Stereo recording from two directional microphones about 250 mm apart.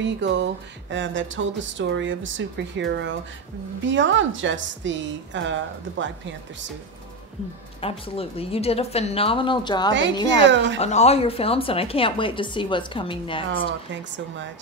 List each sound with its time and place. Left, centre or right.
0.0 s speech: right
7.8 s a woman's voice: left
10.4 s speech: right
10.8 s a woman's voice: left
14.1 s speech: right